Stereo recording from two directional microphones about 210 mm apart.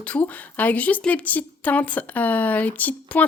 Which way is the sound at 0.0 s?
5° left (ahead or behind).